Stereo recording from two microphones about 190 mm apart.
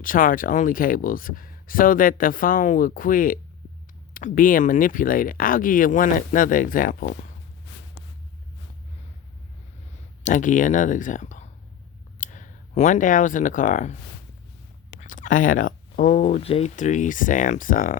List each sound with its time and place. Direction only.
0.0 s speech: 45° left (ahead or behind)
10.2 s speech: 40° left (ahead or behind)
15.0 s speech: 45° left (ahead or behind)